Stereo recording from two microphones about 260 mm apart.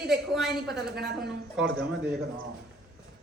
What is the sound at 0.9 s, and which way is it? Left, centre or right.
Speech, right.